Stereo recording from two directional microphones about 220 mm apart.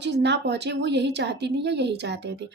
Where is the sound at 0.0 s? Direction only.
50° right (ahead or behind).